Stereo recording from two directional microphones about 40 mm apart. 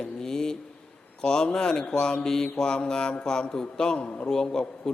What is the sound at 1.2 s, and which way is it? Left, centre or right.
A man's voice, centre.